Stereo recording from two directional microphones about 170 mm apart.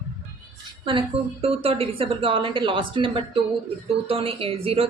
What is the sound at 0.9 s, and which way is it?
Speech, 30° right (ahead or behind).